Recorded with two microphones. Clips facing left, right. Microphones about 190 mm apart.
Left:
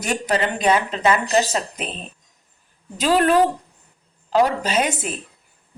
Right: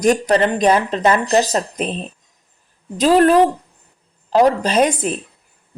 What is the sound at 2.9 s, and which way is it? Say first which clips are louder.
Speech: right 5 dB; 35° right (ahead or behind).